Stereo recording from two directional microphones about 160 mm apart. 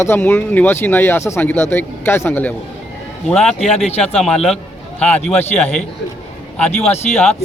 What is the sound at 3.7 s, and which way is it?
Speech, 40° left (ahead or behind).